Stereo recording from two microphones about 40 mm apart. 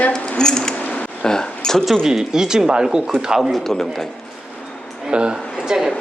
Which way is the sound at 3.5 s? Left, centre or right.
Centre.